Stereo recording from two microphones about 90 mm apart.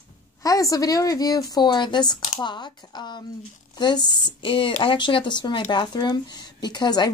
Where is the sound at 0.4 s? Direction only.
40° left (ahead or behind).